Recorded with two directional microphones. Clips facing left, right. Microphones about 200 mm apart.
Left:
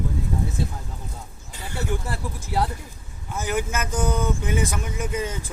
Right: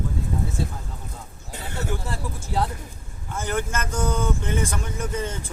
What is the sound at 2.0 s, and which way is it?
Speech, 10° left (ahead or behind).